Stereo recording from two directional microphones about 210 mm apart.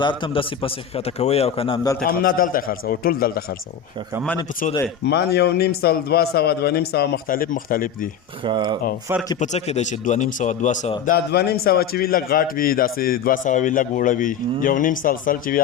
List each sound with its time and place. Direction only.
0.0 s a man's voice: 20° left (ahead or behind)
2.0 s a man's voice: 45° left (ahead or behind)
5.0 s a man's voice: 50° left (ahead or behind)
8.4 s speech: 20° right (ahead or behind)
9.4 s a man's voice: 30° left (ahead or behind)
11.0 s a man's voice: 45° left (ahead or behind)